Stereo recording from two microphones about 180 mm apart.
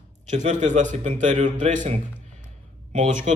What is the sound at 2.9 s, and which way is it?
Speech, 45° right (ahead or behind).